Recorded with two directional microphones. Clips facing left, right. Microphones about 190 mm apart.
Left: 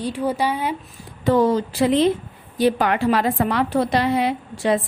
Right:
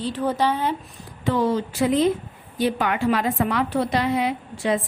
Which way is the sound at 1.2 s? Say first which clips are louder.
Left 4 dB; 40° left (ahead or behind).